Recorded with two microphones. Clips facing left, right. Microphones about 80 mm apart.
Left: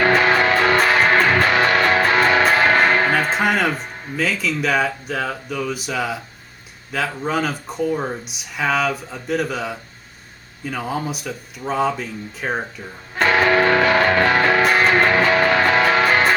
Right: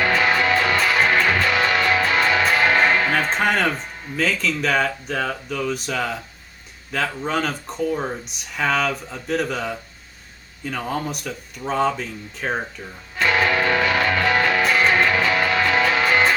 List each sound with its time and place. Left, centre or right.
0.0 s music: left
3.1 s speech: centre
13.1 s music: left